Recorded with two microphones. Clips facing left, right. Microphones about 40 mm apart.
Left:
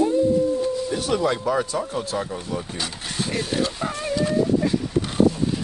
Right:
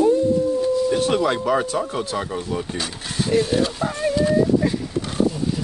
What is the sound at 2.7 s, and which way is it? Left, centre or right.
Speech, centre.